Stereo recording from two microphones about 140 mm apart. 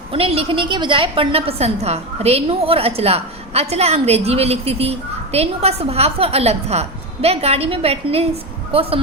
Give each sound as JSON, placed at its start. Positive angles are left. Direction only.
{"t": 0.1, "sound": "a woman's voice", "side_deg": -45}